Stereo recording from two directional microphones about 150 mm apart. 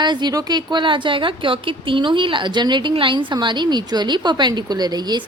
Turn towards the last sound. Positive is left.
turn(degrees=-25)  # may be behind; listen again after turning